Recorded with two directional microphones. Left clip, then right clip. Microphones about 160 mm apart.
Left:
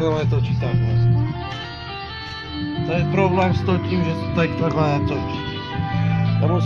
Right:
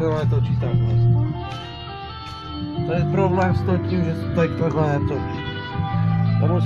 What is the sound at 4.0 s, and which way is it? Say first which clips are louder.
Speech: even; 60° right (ahead or behind).